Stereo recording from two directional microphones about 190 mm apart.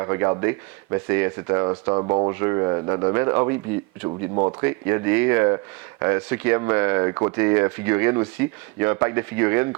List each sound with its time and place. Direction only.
0.0 s speech: 15° right (ahead or behind)